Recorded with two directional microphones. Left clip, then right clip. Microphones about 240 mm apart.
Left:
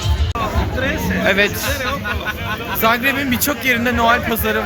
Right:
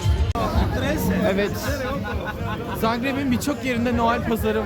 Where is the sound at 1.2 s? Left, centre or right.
Centre.